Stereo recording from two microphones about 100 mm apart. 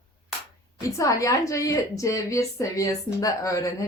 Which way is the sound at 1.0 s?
35° left (ahead or behind).